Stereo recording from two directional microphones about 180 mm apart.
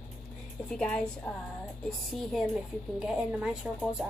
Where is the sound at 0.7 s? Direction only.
5° left (ahead or behind).